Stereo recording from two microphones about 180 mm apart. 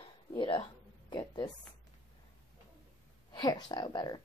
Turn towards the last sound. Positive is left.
turn(degrees=25)  # may be behind; listen again after turning